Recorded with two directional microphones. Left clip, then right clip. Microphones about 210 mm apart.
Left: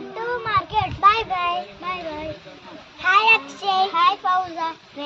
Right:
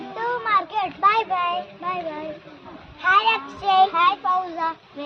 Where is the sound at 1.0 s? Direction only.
10° right (ahead or behind).